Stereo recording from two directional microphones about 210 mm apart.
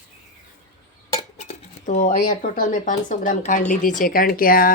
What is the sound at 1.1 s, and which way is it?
Speech, 30° left (ahead or behind).